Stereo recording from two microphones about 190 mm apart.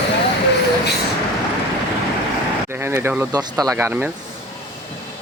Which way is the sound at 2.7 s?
15° right (ahead or behind).